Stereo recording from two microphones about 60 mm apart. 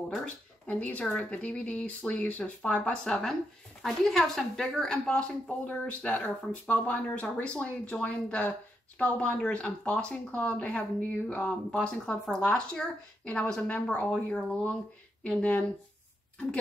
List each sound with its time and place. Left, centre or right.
0.2 s speech: left
3.8 s speech: centre
5.7 s speech: left
11.7 s speech: centre